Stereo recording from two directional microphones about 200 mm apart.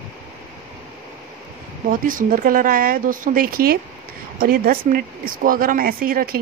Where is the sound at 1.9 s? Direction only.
45° right (ahead or behind).